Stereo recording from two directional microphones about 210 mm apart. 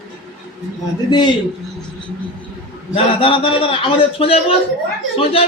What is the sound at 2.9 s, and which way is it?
A man's voice, 25° left (ahead or behind).